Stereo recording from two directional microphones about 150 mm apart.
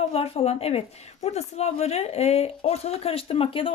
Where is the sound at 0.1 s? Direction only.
40° left (ahead or behind).